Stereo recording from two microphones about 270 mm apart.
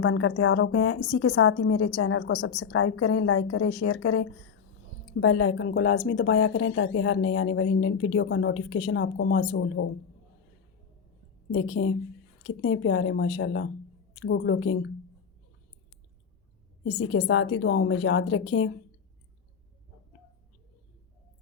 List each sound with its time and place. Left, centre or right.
0.0 s a woman's voice: left
1.9 s a woman's voice: left
5.2 s speech: left
11.5 s speech: left
16.8 s speech: left